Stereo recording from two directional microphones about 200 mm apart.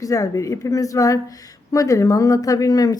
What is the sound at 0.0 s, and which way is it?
Speech, 15° left (ahead or behind).